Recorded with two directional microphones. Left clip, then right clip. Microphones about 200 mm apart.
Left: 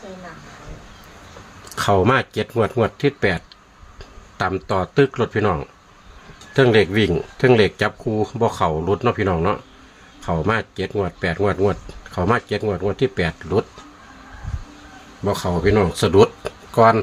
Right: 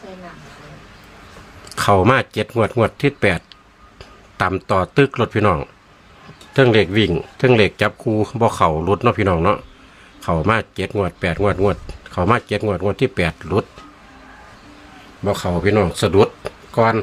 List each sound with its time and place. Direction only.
1.7 s speech: 10° right (ahead or behind)
15.2 s speech: 10° right (ahead or behind)